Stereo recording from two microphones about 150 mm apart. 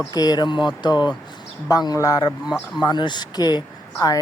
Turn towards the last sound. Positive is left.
turn(degrees=25)  # may be behind; listen again after turning